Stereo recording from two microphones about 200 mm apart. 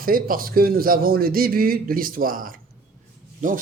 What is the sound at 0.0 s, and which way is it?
A man's voice, 45° right (ahead or behind).